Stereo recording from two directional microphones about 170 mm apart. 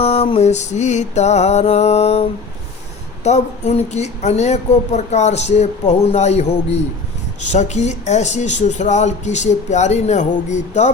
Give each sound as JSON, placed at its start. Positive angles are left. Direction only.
{"t": 0.0, "sound": "speech", "side_deg": 35}
{"t": 3.2, "sound": "speech", "side_deg": 40}